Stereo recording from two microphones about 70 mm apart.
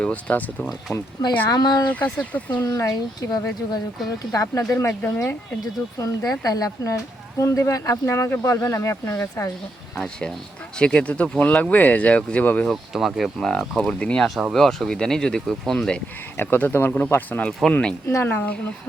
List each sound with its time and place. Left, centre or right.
0.0 s speech: left
1.5 s speech: left
1.9 s speech: left
2.6 s speech: left
4.9 s speech: left
6.0 s speech: left
10.0 s speech: centre
12.7 s speech: centre
13.5 s speech: centre
16.4 s speech: left
17.7 s speech: centre
18.1 s speech: left